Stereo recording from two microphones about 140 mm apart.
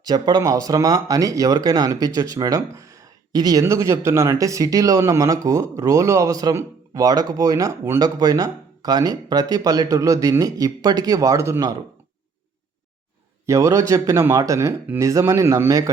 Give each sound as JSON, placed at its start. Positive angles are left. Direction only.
{"t": 0.0, "sound": "speech", "side_deg": -30}
{"t": 13.4, "sound": "speech", "side_deg": -20}